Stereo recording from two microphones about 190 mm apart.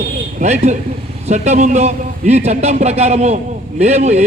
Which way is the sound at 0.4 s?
35° right (ahead or behind).